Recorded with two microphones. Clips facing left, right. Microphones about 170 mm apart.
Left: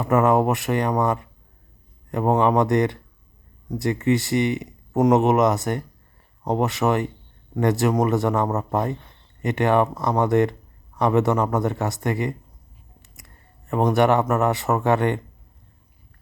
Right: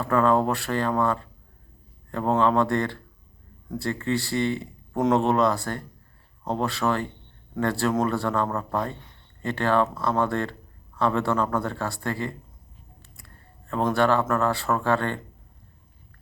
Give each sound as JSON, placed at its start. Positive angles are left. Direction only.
{"t": 0.0, "sound": "speech", "side_deg": 20}